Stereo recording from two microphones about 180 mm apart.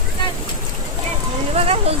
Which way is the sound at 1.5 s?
35° right (ahead or behind).